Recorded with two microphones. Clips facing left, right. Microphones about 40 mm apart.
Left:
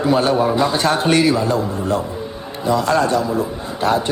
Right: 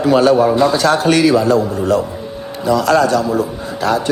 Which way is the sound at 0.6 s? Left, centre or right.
Left.